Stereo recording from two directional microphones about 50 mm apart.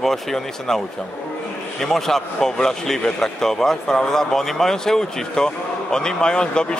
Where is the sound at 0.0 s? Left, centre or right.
Centre.